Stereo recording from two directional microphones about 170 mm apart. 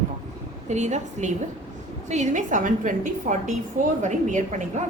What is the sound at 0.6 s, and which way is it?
A woman's voice, 45° right (ahead or behind).